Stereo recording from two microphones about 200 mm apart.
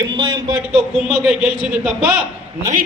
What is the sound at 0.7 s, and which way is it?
A man's voice, 5° right (ahead or behind).